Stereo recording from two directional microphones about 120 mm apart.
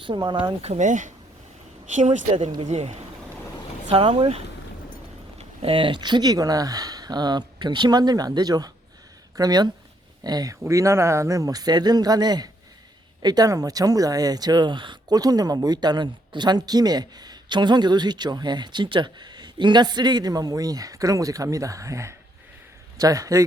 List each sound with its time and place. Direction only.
0.0 s speech: 40° right (ahead or behind)
0.6 s speech: 75° right (ahead or behind)
2.6 s speech: 70° right (ahead or behind)
3.8 s speech: 50° right (ahead or behind)
5.4 s speech: 50° right (ahead or behind); by 23.5 s 30° right (ahead or behind)